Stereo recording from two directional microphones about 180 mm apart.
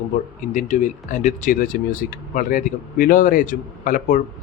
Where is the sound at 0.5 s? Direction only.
40° left (ahead or behind).